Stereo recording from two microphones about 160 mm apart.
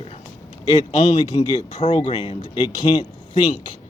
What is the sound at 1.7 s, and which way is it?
A man's voice, 45° left (ahead or behind).